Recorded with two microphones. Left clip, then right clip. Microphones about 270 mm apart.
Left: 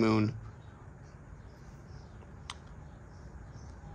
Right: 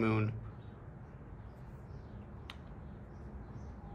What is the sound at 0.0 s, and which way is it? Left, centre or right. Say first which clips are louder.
Speech: left 5 dB; centre.